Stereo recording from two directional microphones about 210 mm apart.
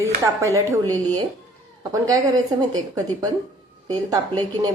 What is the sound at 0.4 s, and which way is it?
Speech, 15° right (ahead or behind).